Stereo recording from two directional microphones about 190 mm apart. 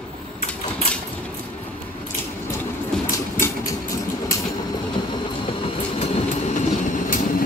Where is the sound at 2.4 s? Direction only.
10° left (ahead or behind).